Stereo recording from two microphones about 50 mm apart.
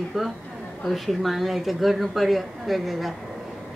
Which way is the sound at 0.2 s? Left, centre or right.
Centre.